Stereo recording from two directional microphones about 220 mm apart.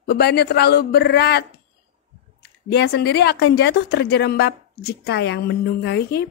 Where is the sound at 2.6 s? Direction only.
50° left (ahead or behind).